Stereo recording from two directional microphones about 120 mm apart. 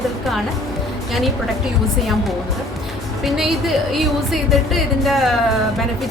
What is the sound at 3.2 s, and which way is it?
Speech, centre (ahead or behind).